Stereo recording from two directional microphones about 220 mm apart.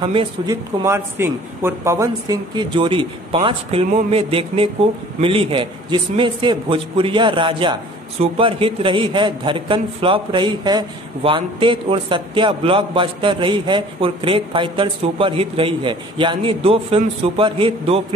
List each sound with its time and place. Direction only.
0.0 s a man's voice: 25° right (ahead or behind)
0.8 s a man's voice: 10° right (ahead or behind)